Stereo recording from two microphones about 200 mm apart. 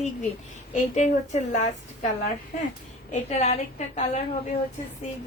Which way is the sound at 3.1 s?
35° left (ahead or behind).